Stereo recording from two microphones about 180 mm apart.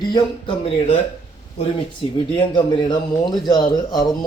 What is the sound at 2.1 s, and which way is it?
Speech, 25° left (ahead or behind).